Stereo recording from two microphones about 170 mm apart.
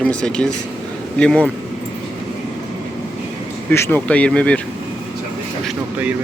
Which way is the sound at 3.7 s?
10° left (ahead or behind).